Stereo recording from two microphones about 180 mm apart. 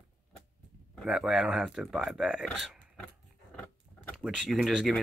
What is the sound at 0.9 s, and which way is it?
Speech, 5° right (ahead or behind).